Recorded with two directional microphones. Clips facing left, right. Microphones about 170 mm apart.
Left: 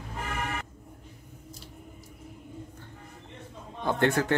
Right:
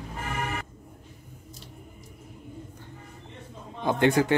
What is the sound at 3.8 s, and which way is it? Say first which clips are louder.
Speech: right 3 dB; 15° right (ahead or behind).